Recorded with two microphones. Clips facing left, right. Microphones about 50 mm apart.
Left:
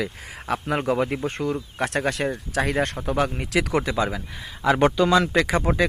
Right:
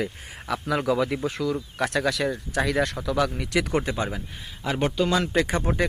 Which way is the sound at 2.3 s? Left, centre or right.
Left.